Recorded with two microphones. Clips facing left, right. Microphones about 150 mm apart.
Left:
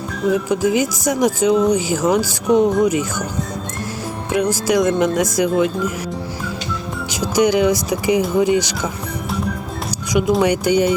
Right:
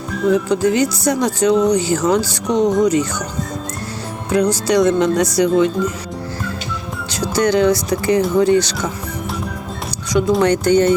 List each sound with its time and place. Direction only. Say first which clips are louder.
0.3 s speech: right 2 dB; 10° left (ahead or behind)
4.3 s speech: right 2 dB; 10° left (ahead or behind)
7.1 s speech: even; 10° left (ahead or behind)
10.1 s speech: right 1 dB; 15° left (ahead or behind)